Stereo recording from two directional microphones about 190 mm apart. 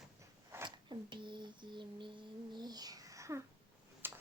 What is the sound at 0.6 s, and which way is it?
Speech, 25° right (ahead or behind).